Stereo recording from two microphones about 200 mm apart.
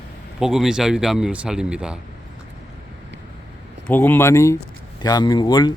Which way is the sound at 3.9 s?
10° left (ahead or behind).